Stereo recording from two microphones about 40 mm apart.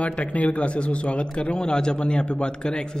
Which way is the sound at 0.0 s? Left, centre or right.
Left.